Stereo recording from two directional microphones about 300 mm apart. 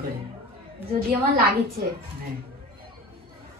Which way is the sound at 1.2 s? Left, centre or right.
Right.